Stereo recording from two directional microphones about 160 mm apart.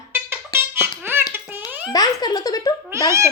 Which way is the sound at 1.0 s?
15° right (ahead or behind).